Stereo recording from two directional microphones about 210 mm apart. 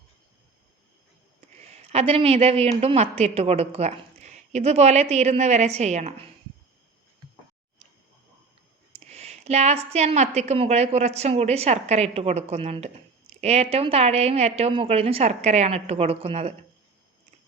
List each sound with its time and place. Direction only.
1.5 s a woman's voice: 30° right (ahead or behind)
9.0 s a woman's voice: 30° right (ahead or behind)